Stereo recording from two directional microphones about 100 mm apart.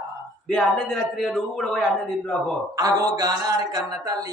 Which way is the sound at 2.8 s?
35° right (ahead or behind).